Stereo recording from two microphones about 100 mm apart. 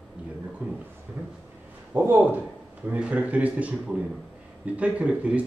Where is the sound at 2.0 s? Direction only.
20° right (ahead or behind).